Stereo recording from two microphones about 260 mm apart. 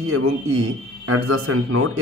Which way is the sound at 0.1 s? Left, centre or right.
Right.